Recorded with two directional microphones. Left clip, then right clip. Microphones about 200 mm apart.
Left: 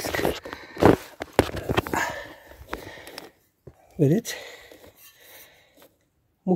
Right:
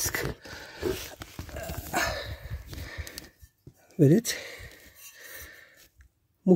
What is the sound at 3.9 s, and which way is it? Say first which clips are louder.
Speech: even; 20° right (ahead or behind).